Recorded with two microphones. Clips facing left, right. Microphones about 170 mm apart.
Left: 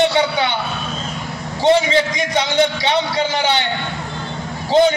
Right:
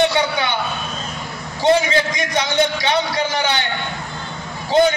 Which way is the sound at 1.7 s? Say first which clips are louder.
Left 2 dB; 25° left (ahead or behind).